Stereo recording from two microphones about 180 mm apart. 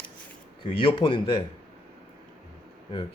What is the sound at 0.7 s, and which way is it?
Speech, 30° left (ahead or behind).